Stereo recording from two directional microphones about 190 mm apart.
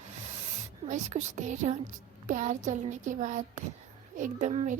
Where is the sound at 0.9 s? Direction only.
40° right (ahead or behind).